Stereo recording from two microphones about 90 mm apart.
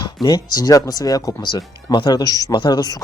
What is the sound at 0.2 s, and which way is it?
Speech, 45° left (ahead or behind).